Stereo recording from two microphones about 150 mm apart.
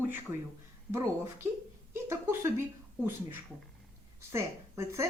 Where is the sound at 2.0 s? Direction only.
15° right (ahead or behind).